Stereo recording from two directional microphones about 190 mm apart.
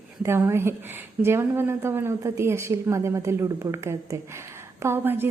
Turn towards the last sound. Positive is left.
turn(degrees=-10)  # may be behind; listen again after turning